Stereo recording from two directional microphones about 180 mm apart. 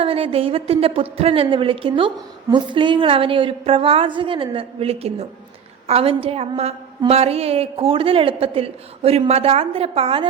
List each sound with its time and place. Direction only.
0.0 s a woman's voice: 30° right (ahead or behind)